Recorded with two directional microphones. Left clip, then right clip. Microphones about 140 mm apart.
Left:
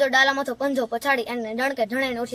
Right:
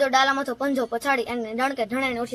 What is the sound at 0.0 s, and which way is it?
Speech, 30° left (ahead or behind).